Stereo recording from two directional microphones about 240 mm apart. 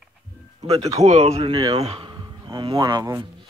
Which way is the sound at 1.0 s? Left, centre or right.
Right.